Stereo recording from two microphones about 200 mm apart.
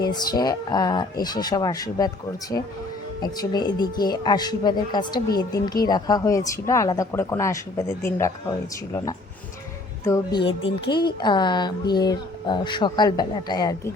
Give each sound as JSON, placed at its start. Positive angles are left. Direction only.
{"t": 0.0, "sound": "speech", "side_deg": 20}
{"t": 3.2, "sound": "a woman's voice", "side_deg": 20}
{"t": 10.4, "sound": "speech", "side_deg": 25}